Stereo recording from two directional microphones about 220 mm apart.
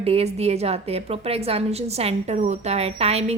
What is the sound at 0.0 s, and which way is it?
A woman's voice, 25° right (ahead or behind).